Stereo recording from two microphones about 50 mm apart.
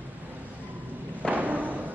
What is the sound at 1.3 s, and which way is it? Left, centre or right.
Thump, right.